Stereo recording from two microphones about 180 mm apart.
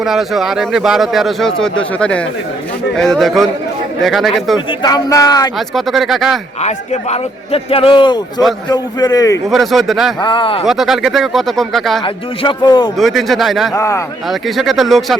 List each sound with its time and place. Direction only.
0.0 s a man's voice: centre (ahead or behind)
4.8 s speech: 20° left (ahead or behind)
5.5 s a man's voice: centre (ahead or behind)
6.6 s a man's voice: 40° left (ahead or behind); by 9.4 s 20° left (ahead or behind)
9.5 s a man's voice: centre (ahead or behind)
10.2 s speech: 25° left (ahead or behind)
10.7 s a man's voice: centre (ahead or behind)
12.0 s speech: 30° left (ahead or behind)
13.0 s a man's voice: centre (ahead or behind)
13.7 s a man's voice: 15° left (ahead or behind)
14.3 s a man's voice: centre (ahead or behind)